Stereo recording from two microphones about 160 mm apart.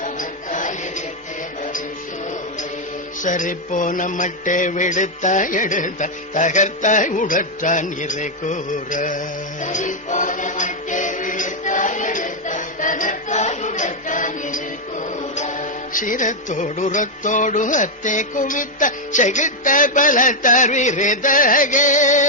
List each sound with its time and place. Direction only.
0.0 s music: 55° left (ahead or behind)
3.2 s music: 55° left (ahead or behind)